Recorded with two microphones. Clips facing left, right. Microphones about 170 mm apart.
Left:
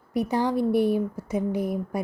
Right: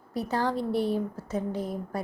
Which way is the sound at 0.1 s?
15° left (ahead or behind).